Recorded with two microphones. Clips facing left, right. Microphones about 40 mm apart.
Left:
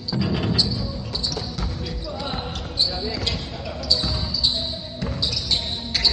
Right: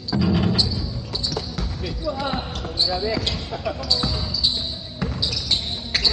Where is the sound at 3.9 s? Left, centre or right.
Centre.